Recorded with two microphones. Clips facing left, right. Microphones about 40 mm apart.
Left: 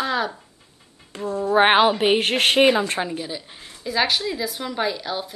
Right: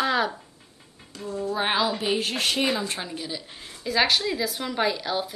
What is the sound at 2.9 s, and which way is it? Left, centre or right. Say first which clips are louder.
A woman's voice: left 6 dB; centre.